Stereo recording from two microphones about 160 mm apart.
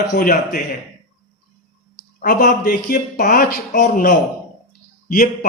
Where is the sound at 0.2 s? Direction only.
60° left (ahead or behind).